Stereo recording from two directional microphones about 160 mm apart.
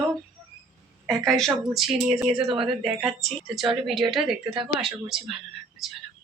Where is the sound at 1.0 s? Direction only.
Centre (ahead or behind).